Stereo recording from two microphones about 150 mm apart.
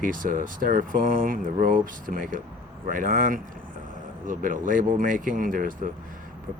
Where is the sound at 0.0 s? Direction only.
65° right (ahead or behind).